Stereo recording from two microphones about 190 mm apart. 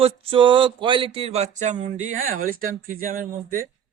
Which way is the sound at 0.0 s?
30° right (ahead or behind).